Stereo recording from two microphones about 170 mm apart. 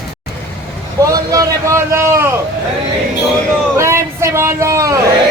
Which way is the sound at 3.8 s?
15° right (ahead or behind).